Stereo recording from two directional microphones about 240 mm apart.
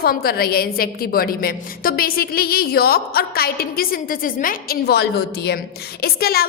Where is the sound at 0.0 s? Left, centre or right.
Left.